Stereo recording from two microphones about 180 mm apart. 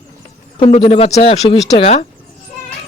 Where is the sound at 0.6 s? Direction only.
30° left (ahead or behind).